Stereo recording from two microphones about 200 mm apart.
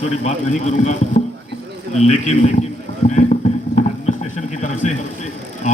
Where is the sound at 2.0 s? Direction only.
35° left (ahead or behind).